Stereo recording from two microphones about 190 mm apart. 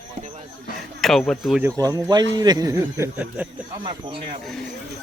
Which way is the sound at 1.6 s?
15° right (ahead or behind).